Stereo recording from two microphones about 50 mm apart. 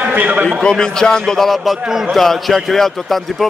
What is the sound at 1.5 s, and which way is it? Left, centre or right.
A man's voice, centre.